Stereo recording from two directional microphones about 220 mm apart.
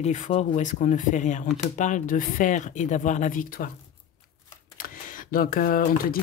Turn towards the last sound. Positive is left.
turn(degrees=40)  # may be behind; listen again after turning